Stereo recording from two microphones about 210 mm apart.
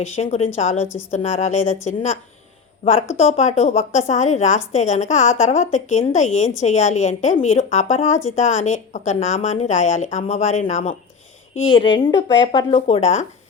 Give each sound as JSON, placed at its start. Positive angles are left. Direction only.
{"t": 0.0, "sound": "a woman's voice", "side_deg": 30}
{"t": 3.2, "sound": "a woman's voice", "side_deg": 30}
{"t": 11.7, "sound": "speech", "side_deg": 20}